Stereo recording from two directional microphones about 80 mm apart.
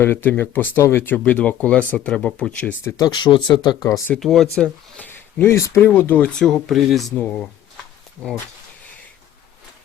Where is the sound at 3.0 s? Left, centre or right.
Left.